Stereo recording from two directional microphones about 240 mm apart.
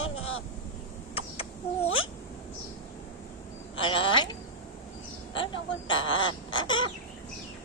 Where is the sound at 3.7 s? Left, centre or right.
Left.